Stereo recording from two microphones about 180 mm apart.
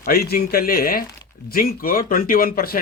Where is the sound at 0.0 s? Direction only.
55° left (ahead or behind).